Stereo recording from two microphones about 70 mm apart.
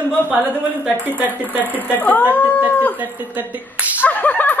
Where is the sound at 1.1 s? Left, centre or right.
Right.